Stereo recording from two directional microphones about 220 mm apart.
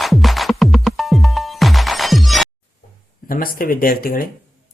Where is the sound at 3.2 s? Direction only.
40° left (ahead or behind).